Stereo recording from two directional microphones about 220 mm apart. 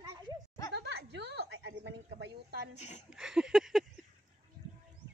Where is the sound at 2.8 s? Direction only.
30° left (ahead or behind).